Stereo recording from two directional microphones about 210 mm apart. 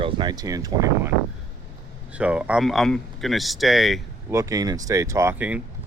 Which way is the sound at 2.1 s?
5° right (ahead or behind).